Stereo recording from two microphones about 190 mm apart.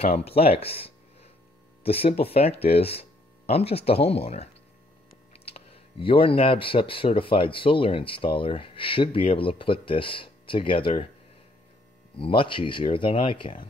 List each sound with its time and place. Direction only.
0.0 s speech: 30° left (ahead or behind)
12.2 s speech: 25° left (ahead or behind)